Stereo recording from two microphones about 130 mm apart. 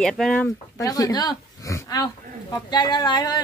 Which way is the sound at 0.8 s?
25° left (ahead or behind).